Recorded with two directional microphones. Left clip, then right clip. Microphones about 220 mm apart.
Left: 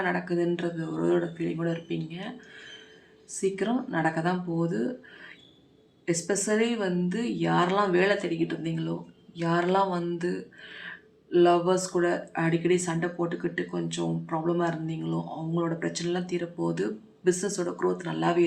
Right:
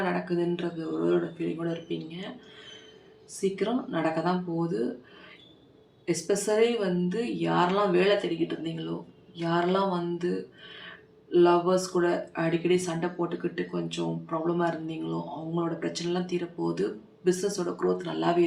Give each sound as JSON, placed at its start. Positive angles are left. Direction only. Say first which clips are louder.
{"t": 0.1, "sound": "speech", "louder": "left 1 dB", "side_deg": 30}
{"t": 3.5, "sound": "speech", "louder": "even", "side_deg": 25}
{"t": 6.1, "sound": "speech", "louder": "right 1 dB", "side_deg": 25}
{"t": 11.3, "sound": "speech", "louder": "even", "side_deg": 30}